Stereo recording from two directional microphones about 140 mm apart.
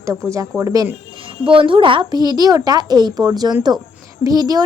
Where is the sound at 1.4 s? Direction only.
40° right (ahead or behind).